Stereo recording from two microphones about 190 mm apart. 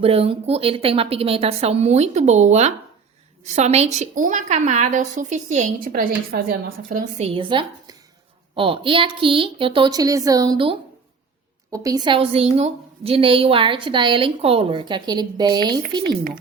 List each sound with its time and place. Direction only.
0.0 s a woman's voice: 30° right (ahead or behind); by 7.3 s 45° right (ahead or behind)
7.3 s a woman's voice: 25° right (ahead or behind)